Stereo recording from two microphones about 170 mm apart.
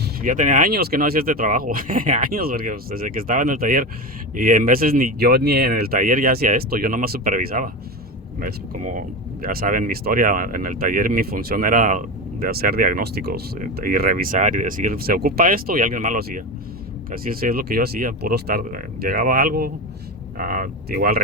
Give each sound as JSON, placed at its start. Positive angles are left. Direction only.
{"t": 0.0, "sound": "speech", "side_deg": -55}
{"t": 13.6, "sound": "speech", "side_deg": -60}